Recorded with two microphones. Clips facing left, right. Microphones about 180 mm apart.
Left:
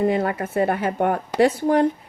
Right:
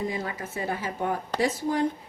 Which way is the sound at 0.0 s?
60° left (ahead or behind).